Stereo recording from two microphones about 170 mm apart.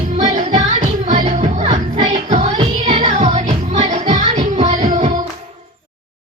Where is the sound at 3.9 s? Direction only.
45° right (ahead or behind).